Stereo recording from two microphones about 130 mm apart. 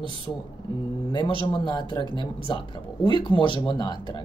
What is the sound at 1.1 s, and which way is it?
Speech, 35° left (ahead or behind).